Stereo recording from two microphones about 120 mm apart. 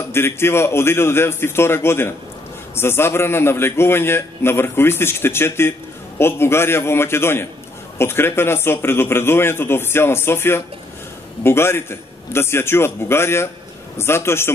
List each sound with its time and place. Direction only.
0.1 s a man's voice: 20° left (ahead or behind)